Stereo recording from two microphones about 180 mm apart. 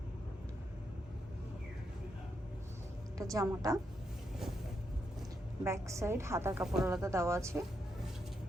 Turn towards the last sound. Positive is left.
turn(degrees=-15)  # may be behind; listen again after turning